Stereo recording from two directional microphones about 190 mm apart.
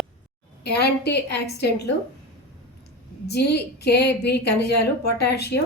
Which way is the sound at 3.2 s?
60° left (ahead or behind).